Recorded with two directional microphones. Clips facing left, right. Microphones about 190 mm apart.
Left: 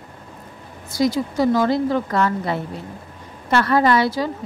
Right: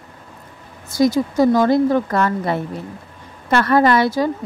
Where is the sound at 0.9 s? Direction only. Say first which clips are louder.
Right 4 dB; 45° right (ahead or behind).